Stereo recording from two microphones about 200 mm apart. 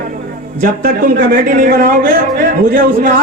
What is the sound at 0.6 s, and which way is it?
Speech, 45° right (ahead or behind).